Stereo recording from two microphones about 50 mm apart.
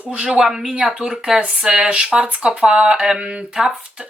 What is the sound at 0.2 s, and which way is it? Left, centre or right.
Speech, centre.